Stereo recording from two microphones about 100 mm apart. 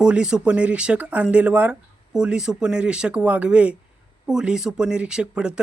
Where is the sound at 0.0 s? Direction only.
10° right (ahead or behind).